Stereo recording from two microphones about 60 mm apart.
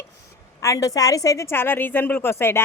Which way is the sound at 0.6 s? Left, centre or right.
Left.